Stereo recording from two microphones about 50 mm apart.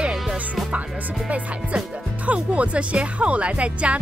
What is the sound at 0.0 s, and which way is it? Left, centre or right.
Music, right.